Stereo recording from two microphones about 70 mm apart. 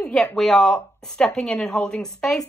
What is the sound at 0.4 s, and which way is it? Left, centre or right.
Speech, centre.